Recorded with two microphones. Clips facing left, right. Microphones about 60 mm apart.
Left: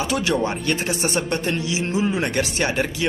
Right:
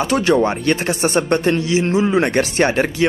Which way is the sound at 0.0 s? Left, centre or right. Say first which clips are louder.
Right 6 dB; right.